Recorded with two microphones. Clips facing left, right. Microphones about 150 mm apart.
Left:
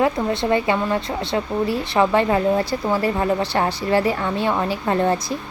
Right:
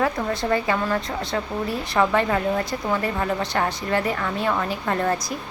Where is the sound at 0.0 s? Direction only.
25° left (ahead or behind).